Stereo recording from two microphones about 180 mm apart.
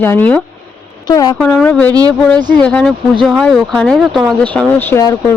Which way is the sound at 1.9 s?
20° right (ahead or behind).